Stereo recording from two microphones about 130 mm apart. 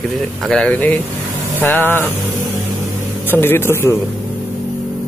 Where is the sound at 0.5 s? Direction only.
10° left (ahead or behind).